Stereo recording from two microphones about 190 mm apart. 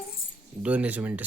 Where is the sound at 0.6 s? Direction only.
5° right (ahead or behind).